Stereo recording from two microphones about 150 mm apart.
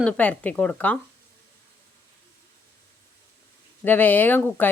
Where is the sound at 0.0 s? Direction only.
10° left (ahead or behind).